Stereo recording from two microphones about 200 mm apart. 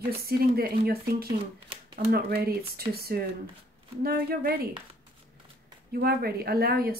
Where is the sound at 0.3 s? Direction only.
50° right (ahead or behind).